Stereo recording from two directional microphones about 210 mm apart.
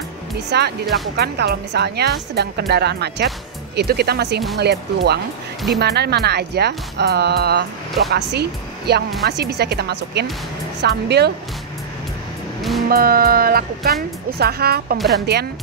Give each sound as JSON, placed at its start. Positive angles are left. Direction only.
{"t": 0.5, "sound": "speech", "side_deg": -50}
{"t": 12.8, "sound": "speech", "side_deg": -45}